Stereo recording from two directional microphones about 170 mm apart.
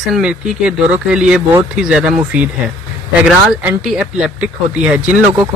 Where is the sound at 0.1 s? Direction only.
5° right (ahead or behind).